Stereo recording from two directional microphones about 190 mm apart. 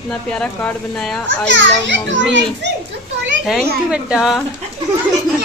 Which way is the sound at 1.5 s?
70° right (ahead or behind).